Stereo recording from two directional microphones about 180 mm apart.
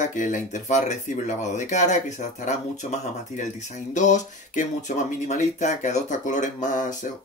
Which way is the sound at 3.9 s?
40° left (ahead or behind).